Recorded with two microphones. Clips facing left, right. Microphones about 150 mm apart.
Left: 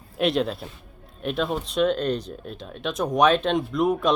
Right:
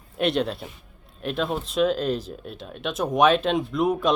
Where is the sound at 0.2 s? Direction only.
Centre (ahead or behind).